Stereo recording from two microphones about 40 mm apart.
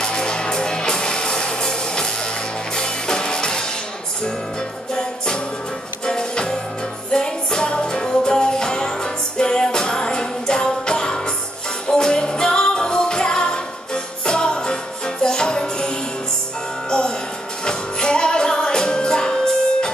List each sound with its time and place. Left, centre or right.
0.0 s music: centre
4.9 s music: centre
17.6 s music: left